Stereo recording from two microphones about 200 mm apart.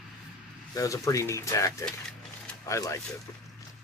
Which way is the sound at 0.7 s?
15° left (ahead or behind).